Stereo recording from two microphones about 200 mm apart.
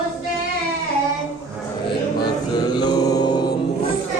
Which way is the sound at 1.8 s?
20° left (ahead or behind).